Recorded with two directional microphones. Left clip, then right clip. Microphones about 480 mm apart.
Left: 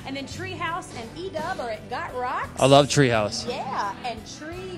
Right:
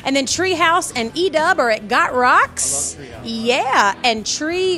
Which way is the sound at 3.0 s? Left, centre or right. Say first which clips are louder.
Left 16 dB; left.